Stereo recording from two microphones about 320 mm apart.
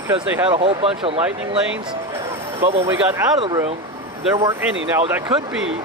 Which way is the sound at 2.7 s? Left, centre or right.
Centre.